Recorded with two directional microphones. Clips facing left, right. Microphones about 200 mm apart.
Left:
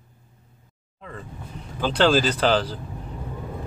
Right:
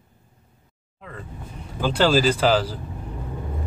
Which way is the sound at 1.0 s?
Centre (ahead or behind).